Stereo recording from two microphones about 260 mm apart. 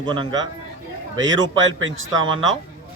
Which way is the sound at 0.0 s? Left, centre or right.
Centre.